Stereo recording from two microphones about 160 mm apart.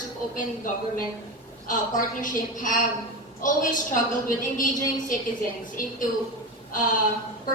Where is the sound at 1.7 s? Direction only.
55° left (ahead or behind).